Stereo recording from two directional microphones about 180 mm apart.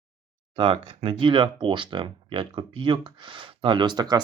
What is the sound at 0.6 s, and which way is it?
Speech, 30° right (ahead or behind).